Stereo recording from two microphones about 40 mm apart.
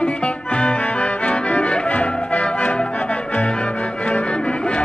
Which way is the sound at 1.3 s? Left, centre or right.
Left.